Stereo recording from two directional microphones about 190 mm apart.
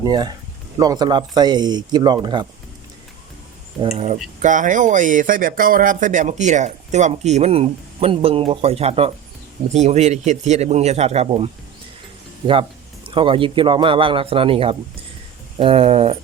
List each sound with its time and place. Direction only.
0.0 s a man's voice: 20° right (ahead or behind)
3.8 s speech: 30° right (ahead or behind)
13.1 s a man's voice: 25° right (ahead or behind)